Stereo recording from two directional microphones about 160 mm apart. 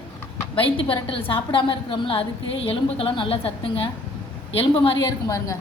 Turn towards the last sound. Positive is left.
turn(degrees=20)  # may be behind; listen again after turning